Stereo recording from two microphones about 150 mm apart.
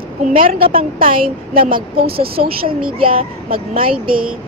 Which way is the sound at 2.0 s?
40° right (ahead or behind).